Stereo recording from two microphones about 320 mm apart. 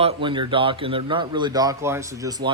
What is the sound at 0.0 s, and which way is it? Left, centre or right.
A man's voice, centre.